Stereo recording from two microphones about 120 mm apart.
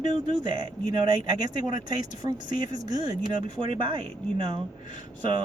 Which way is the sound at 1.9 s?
35° right (ahead or behind).